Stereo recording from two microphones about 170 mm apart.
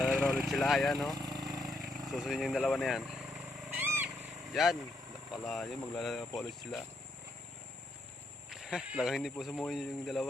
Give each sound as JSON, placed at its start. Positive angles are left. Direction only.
{"t": 0.0, "sound": "a sound", "side_deg": 0}
{"t": 1.1, "sound": "vehicle", "side_deg": -20}
{"t": 1.5, "sound": "speech", "side_deg": 0}
{"t": 3.8, "sound": "vehicle", "side_deg": -10}
{"t": 4.5, "sound": "speech", "side_deg": 0}
{"t": 8.4, "sound": "speech", "side_deg": -5}